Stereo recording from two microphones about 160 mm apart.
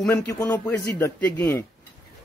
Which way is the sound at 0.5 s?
15° left (ahead or behind).